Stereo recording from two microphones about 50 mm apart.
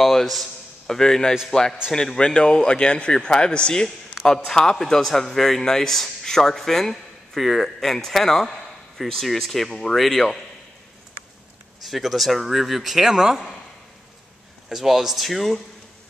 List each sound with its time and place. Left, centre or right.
0.0 s a man's voice: centre
2.1 s a man's voice: centre
11.8 s speech: centre
14.7 s speech: centre